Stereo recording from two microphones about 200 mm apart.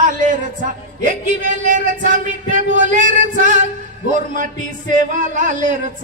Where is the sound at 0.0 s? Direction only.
40° right (ahead or behind).